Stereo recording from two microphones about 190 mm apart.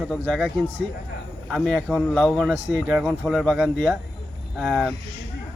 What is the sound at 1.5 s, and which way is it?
Speech, centre (ahead or behind).